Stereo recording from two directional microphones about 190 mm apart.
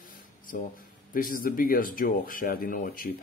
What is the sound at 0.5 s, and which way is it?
Speech, 45° left (ahead or behind).